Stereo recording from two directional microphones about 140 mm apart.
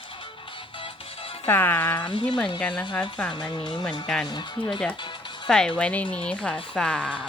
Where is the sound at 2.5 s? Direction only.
5° left (ahead or behind).